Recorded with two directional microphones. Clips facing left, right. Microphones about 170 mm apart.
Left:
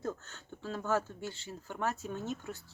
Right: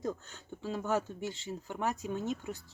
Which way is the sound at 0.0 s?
15° right (ahead or behind).